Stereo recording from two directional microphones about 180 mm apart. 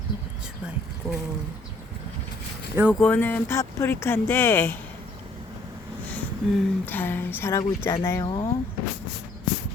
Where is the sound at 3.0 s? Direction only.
10° left (ahead or behind).